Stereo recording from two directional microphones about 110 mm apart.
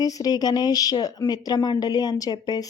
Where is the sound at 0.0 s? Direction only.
35° left (ahead or behind).